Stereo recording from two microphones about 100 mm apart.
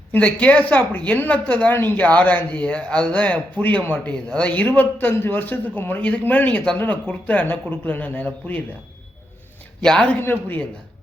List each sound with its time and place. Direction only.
0.1 s a woman's voice: 15° left (ahead or behind)
9.8 s a woman's voice: 10° left (ahead or behind)
10.2 s speech: 20° left (ahead or behind)